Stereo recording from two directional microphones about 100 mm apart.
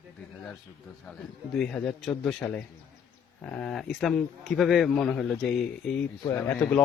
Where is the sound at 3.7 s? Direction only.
Centre (ahead or behind).